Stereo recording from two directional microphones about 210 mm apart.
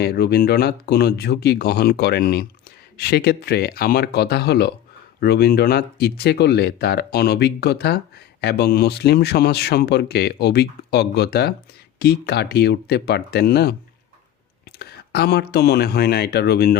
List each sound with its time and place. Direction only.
0.0 s speech: 50° left (ahead or behind)
14.8 s speech: 50° left (ahead or behind)